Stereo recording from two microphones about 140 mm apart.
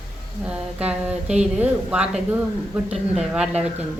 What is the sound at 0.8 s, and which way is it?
A woman's voice, 5° right (ahead or behind).